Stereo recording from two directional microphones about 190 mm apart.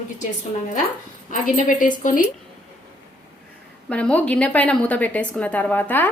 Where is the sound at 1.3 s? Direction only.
45° left (ahead or behind).